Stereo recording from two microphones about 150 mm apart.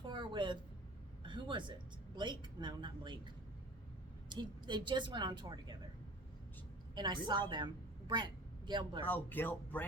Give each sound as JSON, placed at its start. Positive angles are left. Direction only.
{"t": 0.0, "sound": "a sound", "side_deg": -30}
{"t": 4.3, "sound": "a woman's voice", "side_deg": -30}
{"t": 6.9, "sound": "a woman's voice", "side_deg": -30}
{"t": 9.0, "sound": "speech", "side_deg": 10}